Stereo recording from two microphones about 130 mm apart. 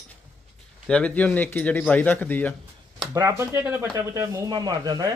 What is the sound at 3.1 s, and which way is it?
Speech, 20° right (ahead or behind).